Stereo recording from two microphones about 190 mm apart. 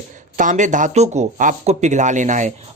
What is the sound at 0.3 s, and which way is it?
Speech, 40° right (ahead or behind).